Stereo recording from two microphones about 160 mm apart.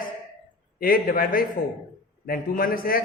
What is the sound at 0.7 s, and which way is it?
A man's voice, 65° left (ahead or behind).